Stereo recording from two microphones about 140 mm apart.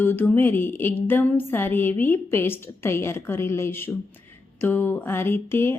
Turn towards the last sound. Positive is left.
turn(degrees=15)  # may be behind; listen again after turning